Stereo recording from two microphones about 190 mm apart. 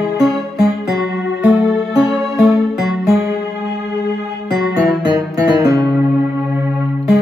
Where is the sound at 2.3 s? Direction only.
Centre (ahead or behind).